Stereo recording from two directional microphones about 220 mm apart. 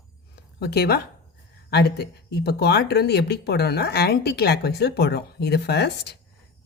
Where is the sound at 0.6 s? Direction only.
45° left (ahead or behind).